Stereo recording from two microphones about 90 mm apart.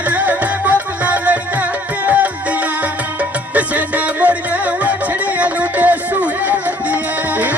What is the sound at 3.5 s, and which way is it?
Music, 15° right (ahead or behind).